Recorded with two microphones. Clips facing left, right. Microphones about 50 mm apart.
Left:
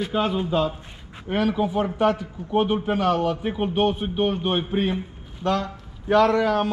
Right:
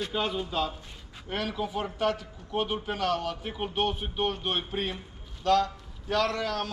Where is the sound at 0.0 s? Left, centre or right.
Centre.